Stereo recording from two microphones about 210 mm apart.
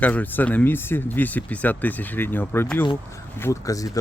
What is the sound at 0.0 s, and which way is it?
Speech, 5° left (ahead or behind).